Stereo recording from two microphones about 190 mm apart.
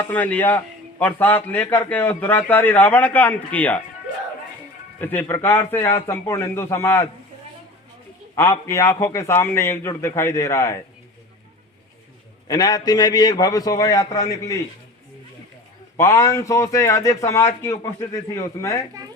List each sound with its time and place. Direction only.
0.1 s a man's voice: 10° left (ahead or behind)
4.9 s a man's voice: 10° left (ahead or behind)
8.4 s a man's voice: 15° left (ahead or behind)
12.5 s a man's voice: 20° left (ahead or behind)
16.0 s a man's voice: 15° left (ahead or behind)